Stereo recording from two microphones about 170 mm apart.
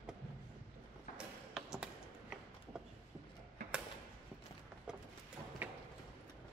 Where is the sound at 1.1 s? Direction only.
5° right (ahead or behind).